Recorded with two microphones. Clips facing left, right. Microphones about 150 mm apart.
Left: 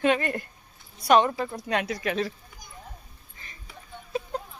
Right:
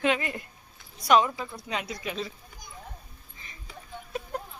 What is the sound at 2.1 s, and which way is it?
Speech, 65° left (ahead or behind).